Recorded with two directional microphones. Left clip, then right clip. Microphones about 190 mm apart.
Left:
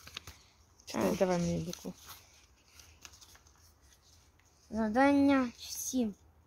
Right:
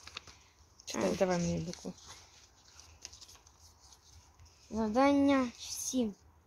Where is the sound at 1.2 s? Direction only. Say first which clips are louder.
Left 1 dB; 10° left (ahead or behind).